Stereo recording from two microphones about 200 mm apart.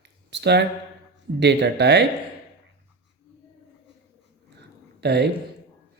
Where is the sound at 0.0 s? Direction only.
60° right (ahead or behind).